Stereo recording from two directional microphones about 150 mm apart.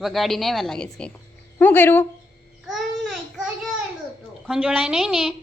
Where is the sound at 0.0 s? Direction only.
Centre (ahead or behind).